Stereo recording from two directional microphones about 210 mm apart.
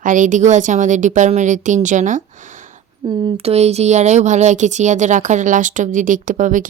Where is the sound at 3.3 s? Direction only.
30° right (ahead or behind).